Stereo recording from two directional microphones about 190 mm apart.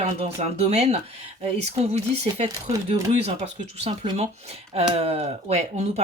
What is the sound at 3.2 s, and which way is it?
Speech, 35° right (ahead or behind).